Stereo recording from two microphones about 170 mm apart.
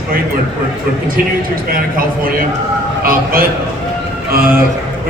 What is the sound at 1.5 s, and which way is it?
A man's voice, 55° right (ahead or behind).